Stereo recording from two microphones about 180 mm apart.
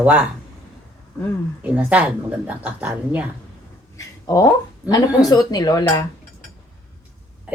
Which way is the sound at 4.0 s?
20° left (ahead or behind).